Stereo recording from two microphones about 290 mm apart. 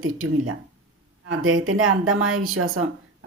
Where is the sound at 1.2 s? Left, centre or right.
Right.